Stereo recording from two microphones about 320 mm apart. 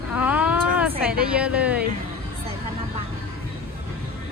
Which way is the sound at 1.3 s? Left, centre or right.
Centre.